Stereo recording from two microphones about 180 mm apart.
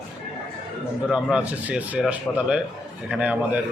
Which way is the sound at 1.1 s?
5° right (ahead or behind).